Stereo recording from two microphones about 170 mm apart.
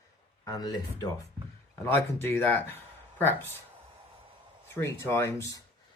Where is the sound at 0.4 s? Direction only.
25° left (ahead or behind).